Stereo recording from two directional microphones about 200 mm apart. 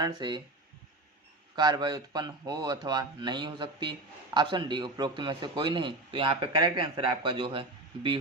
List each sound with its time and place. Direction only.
0.0 s a man's voice: 20° right (ahead or behind)
1.5 s a man's voice: 20° right (ahead or behind)